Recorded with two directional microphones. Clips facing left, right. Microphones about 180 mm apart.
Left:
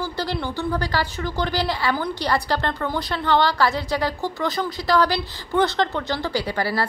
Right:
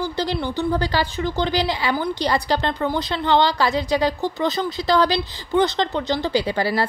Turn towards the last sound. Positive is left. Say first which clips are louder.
# right 3 dB
turn(degrees=-20)  # may be behind; listen again after turning